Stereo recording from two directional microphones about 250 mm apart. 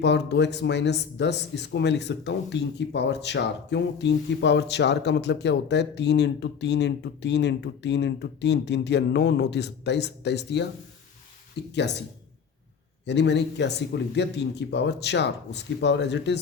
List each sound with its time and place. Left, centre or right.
0.0 s speech: left
11.7 s speech: left
13.1 s speech: left